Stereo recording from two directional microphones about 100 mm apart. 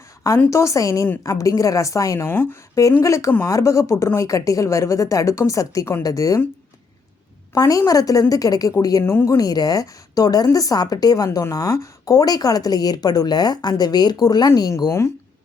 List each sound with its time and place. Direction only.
0.5 s a woman's voice: 30° left (ahead or behind)
7.5 s a woman's voice: 35° left (ahead or behind)
9.0 s speech: 25° left (ahead or behind)
9.4 s a woman's voice: 40° left (ahead or behind)
14.8 s a woman's voice: 30° left (ahead or behind)